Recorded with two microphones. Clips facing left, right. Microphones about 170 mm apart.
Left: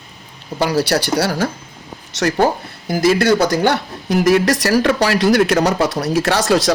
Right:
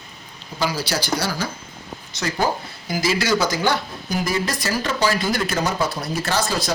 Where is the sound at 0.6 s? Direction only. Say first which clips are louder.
Left 7 dB; 65° left (ahead or behind).